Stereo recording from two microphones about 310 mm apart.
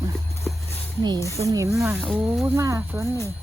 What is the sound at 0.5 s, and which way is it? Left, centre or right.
Dog, centre.